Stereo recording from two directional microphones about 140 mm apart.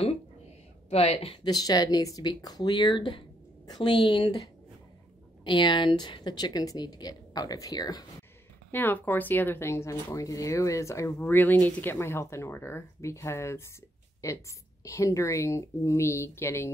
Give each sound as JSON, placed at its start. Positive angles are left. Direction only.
{"t": 0.8, "sound": "a woman's voice", "side_deg": 45}
{"t": 8.7, "sound": "a woman's voice", "side_deg": 15}